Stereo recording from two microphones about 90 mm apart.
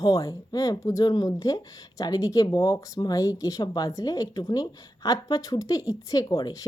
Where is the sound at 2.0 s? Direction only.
40° left (ahead or behind).